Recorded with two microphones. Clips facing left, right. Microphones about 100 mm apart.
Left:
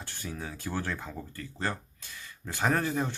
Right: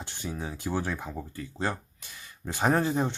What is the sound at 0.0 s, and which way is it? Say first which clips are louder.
Speech: right 3 dB; 20° right (ahead or behind).